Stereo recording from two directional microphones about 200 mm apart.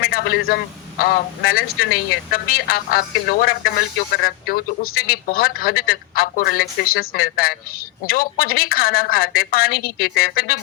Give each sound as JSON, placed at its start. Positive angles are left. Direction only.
{"t": 0.0, "sound": "a man's voice", "side_deg": 50}